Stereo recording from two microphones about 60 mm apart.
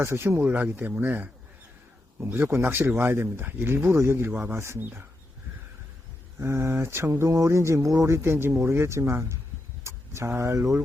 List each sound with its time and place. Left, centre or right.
0.0 s speech: right
0.4 s speech: right
2.1 s speech: right
6.4 s speech: right